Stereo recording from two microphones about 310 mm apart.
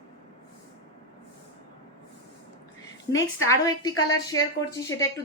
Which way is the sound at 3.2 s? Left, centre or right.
Centre.